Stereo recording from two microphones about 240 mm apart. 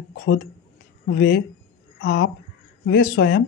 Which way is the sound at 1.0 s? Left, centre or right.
Left.